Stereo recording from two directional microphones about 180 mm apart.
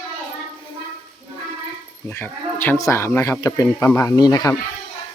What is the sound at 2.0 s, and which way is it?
Speech, 10° left (ahead or behind).